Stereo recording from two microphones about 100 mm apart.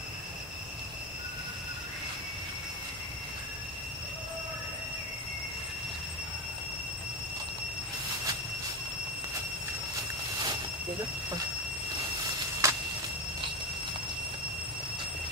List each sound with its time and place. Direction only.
12.6 s vehicle: 30° right (ahead or behind)